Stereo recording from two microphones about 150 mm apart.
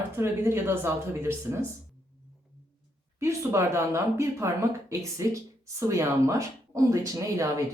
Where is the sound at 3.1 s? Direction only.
20° right (ahead or behind).